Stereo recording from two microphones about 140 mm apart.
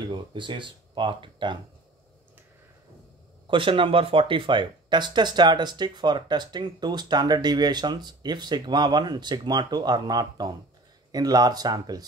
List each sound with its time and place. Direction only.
0.1 s speech: 35° right (ahead or behind)
3.4 s speech: 40° right (ahead or behind)